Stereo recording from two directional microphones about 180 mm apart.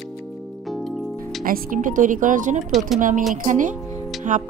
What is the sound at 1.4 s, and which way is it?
Speech, 50° right (ahead or behind).